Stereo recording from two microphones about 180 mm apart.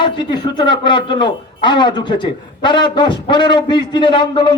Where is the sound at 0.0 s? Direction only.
25° left (ahead or behind).